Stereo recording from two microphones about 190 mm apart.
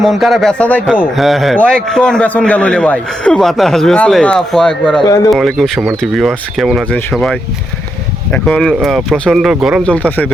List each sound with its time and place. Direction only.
0.0 s a man's voice: centre (ahead or behind)
5.0 s speech: 20° left (ahead or behind)
5.3 s a man's voice: centre (ahead or behind)